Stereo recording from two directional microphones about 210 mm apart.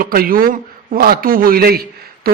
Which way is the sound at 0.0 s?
45° right (ahead or behind).